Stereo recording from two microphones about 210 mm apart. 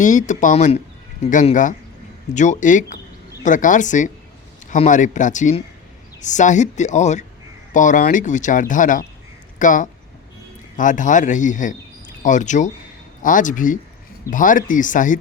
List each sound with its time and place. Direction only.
0.0 s speech: 35° left (ahead or behind)